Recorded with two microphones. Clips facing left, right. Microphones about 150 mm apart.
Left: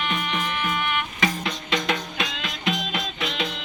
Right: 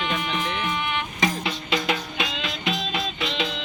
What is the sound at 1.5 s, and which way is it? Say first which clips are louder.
Music: even; 5° right (ahead or behind).